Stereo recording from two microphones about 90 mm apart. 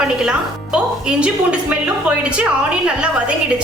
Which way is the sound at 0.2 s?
10° right (ahead or behind).